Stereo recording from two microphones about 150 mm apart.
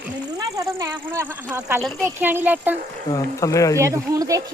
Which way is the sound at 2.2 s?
10° right (ahead or behind).